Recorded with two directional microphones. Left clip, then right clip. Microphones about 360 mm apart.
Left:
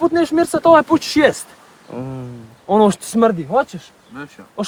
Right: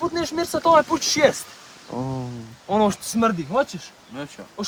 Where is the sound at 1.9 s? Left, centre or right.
Centre.